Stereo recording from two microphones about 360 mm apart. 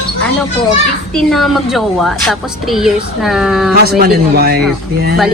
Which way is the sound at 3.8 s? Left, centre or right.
Right.